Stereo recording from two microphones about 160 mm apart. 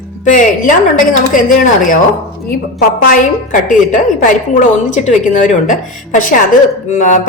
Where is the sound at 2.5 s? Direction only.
70° left (ahead or behind).